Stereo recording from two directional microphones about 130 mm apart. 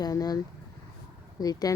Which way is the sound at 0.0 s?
30° left (ahead or behind).